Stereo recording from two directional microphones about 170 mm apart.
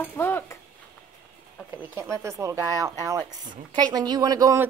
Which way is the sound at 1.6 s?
15° right (ahead or behind).